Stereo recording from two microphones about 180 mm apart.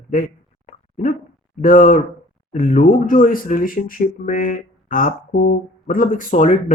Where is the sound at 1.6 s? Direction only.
50° left (ahead or behind).